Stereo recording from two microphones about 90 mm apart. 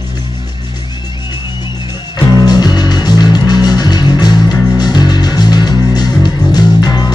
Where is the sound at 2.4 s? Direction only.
50° left (ahead or behind).